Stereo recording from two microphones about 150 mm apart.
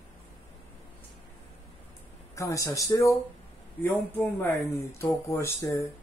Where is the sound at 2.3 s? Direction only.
20° left (ahead or behind).